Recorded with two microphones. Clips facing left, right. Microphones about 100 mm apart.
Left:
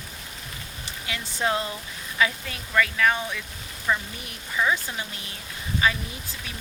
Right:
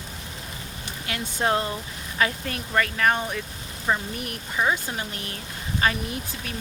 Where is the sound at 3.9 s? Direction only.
30° right (ahead or behind).